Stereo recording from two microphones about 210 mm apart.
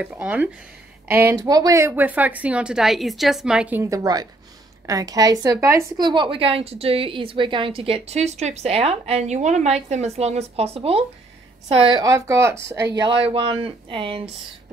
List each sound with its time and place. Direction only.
0.0 s a woman's voice: 5° right (ahead or behind)
13.0 s a woman's voice: 25° right (ahead or behind)